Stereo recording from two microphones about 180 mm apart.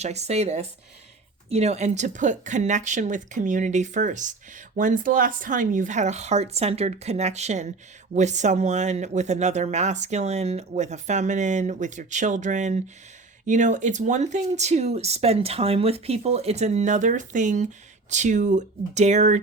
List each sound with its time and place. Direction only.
0.0 s speech: 35° right (ahead or behind)